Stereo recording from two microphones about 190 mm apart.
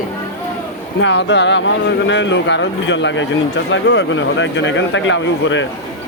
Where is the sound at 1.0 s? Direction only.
70° left (ahead or behind).